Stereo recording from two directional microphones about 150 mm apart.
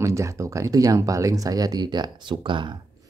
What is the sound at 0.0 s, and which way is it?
Speech, 20° right (ahead or behind).